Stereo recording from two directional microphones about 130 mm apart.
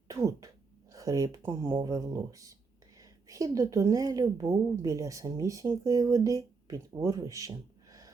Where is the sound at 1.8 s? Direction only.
25° right (ahead or behind).